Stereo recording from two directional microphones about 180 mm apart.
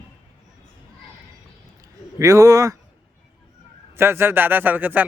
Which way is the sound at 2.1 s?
20° right (ahead or behind).